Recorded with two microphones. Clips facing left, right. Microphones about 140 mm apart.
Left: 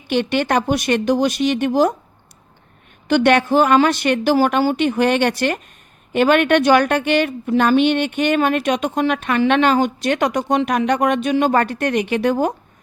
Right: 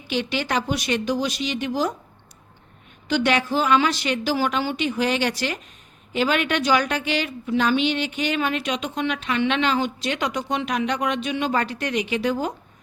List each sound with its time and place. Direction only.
0.1 s a woman's voice: 55° left (ahead or behind)
3.1 s a woman's voice: 55° left (ahead or behind)